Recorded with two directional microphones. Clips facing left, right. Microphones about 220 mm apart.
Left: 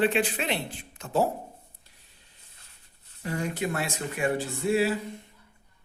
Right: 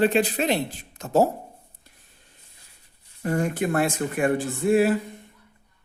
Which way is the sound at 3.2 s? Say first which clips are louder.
Right 6 dB; 50° right (ahead or behind).